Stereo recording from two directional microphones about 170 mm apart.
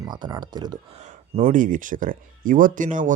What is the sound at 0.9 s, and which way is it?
Speech, 40° right (ahead or behind).